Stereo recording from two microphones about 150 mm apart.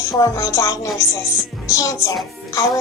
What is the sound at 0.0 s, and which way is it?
A woman's voice, 20° left (ahead or behind).